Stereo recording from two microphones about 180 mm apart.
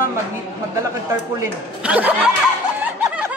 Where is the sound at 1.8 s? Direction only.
5° right (ahead or behind).